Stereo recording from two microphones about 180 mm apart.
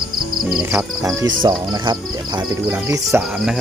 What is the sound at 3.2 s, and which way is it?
Speech, 5° right (ahead or behind).